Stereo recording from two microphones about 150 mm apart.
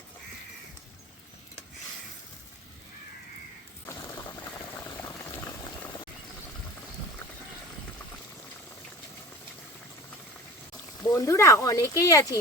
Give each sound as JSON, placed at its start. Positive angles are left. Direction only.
{"t": 11.1, "sound": "speech", "side_deg": 20}